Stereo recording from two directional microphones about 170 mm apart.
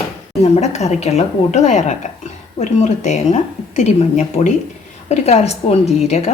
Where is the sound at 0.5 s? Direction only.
40° left (ahead or behind).